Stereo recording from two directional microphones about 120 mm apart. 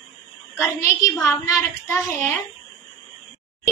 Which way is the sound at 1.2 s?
25° left (ahead or behind).